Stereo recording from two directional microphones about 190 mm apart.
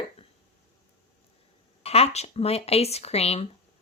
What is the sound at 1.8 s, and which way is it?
Speech, 30° left (ahead or behind).